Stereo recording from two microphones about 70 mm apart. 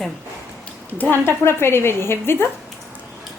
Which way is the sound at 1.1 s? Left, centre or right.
Left.